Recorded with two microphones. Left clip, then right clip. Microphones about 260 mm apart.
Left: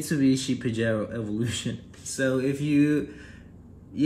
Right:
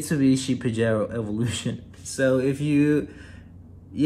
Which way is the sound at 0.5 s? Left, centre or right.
Centre.